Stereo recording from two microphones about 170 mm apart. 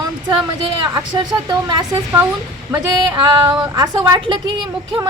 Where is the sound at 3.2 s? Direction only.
25° right (ahead or behind).